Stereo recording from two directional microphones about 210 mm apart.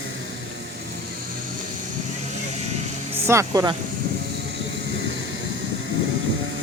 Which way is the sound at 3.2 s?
15° right (ahead or behind).